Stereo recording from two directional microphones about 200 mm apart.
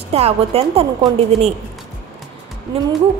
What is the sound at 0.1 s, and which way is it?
A woman's voice, 30° right (ahead or behind).